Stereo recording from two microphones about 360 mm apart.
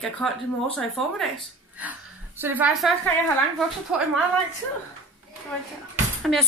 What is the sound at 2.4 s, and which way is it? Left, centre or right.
A child's voice, centre.